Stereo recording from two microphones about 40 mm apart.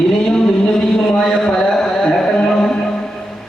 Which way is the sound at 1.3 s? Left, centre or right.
Centre.